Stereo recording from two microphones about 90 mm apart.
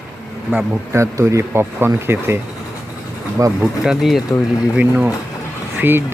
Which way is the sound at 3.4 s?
35° right (ahead or behind).